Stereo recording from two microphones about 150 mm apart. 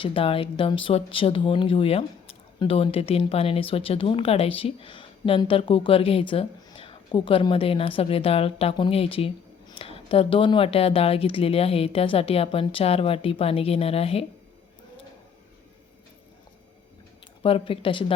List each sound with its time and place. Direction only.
0.0 s a woman's voice: 35° left (ahead or behind)
17.4 s a woman's voice: 35° left (ahead or behind)